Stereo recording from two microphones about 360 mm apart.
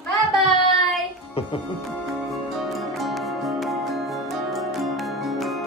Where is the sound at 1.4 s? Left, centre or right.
Centre.